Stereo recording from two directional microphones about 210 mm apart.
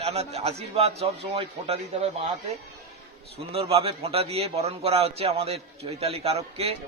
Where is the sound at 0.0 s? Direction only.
30° right (ahead or behind).